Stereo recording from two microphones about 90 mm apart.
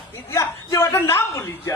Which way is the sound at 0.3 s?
35° left (ahead or behind).